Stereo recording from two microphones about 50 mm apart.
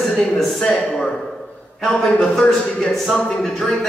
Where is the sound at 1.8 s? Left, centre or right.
Centre.